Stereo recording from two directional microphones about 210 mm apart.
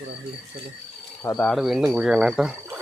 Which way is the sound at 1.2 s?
10° left (ahead or behind).